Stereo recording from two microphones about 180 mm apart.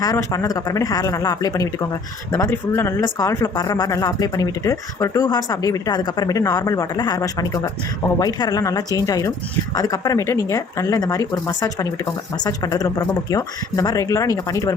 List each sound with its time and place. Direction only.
0.0 s speech: 20° left (ahead or behind)